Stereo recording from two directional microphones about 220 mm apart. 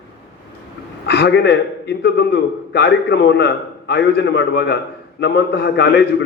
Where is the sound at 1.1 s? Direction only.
50° left (ahead or behind).